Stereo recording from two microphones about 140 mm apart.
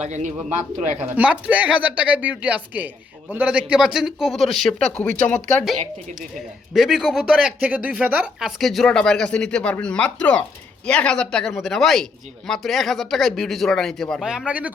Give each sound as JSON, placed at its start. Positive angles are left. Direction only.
{"t": 0.0, "sound": "speech", "side_deg": -60}
{"t": 0.9, "sound": "speech", "side_deg": -10}
{"t": 6.7, "sound": "speech", "side_deg": 0}